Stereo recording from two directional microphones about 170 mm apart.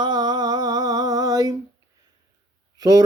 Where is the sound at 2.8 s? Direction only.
20° right (ahead or behind).